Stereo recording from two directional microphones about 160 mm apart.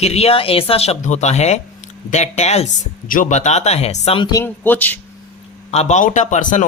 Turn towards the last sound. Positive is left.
turn(degrees=50)  # may be behind; listen again after turning